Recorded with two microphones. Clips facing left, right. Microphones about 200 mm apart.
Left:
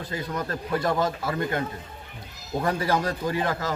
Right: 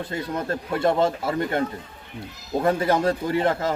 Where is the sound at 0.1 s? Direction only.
25° right (ahead or behind).